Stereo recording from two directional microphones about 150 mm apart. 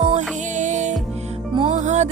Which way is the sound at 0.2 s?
55° right (ahead or behind).